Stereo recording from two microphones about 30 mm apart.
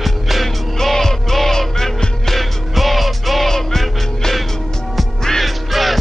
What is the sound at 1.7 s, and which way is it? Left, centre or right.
Music, left.